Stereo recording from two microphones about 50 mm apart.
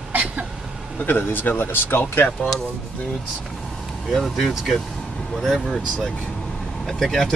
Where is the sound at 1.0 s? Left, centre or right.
Left.